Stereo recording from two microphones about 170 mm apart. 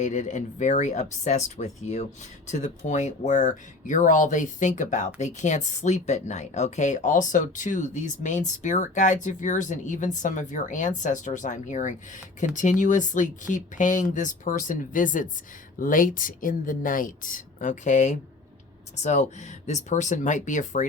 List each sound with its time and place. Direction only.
0.0 s speech: 45° left (ahead or behind)